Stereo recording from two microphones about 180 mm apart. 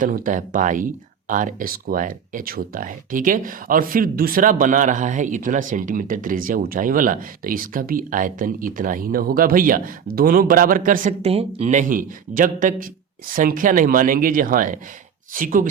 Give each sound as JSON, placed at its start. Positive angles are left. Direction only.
{"t": 0.0, "sound": "speech", "side_deg": -50}